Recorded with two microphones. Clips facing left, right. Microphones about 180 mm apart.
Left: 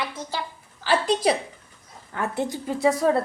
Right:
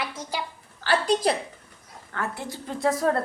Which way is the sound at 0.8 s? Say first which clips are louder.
Left 1 dB; 10° left (ahead or behind).